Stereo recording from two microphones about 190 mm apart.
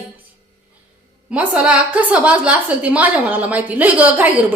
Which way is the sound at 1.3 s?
5° right (ahead or behind).